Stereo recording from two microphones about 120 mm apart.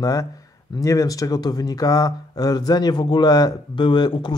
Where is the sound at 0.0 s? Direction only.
30° left (ahead or behind).